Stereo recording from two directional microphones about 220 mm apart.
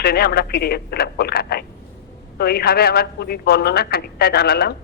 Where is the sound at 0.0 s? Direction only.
45° left (ahead or behind).